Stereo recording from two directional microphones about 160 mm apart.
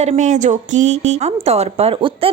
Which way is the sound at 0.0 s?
45° right (ahead or behind).